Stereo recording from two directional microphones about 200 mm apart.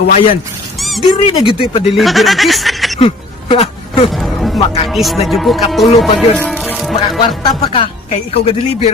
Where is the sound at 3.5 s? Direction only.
30° left (ahead or behind).